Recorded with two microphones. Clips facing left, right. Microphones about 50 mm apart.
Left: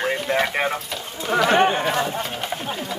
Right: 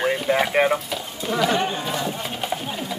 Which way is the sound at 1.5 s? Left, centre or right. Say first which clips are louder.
Left 5 dB; left.